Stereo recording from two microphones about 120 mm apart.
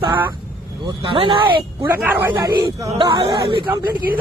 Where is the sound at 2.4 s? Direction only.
30° right (ahead or behind).